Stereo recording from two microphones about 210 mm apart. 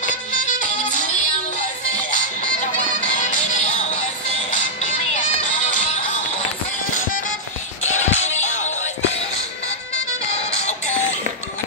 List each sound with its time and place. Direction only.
0.8 s music: 40° left (ahead or behind)
3.2 s music: 35° left (ahead or behind)
7.8 s music: 70° left (ahead or behind)
8.2 s music: 30° left (ahead or behind)
10.3 s music: 30° left (ahead or behind)